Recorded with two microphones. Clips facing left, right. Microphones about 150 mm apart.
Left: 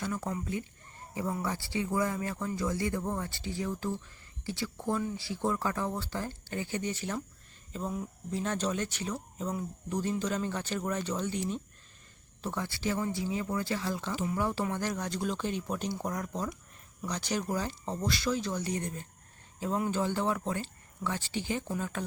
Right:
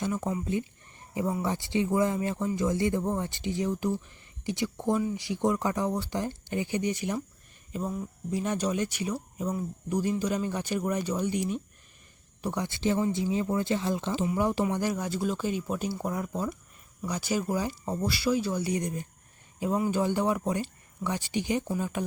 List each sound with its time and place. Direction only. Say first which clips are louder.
0.0 s speech: right 4 dB; 20° right (ahead or behind)